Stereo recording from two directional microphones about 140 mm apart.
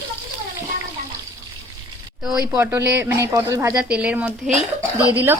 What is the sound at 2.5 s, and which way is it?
Speech, 15° right (ahead or behind).